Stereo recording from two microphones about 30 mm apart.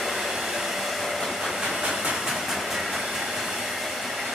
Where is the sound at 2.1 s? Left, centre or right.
Centre.